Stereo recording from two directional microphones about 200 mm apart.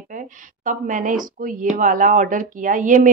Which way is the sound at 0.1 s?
40° right (ahead or behind).